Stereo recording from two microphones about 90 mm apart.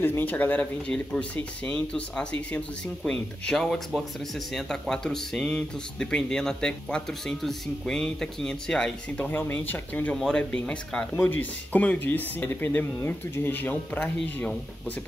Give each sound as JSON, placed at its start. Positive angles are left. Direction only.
{"t": 0.0, "sound": "speech", "side_deg": 20}
{"t": 9.2, "sound": "speech", "side_deg": 20}
{"t": 10.1, "sound": "speech", "side_deg": 10}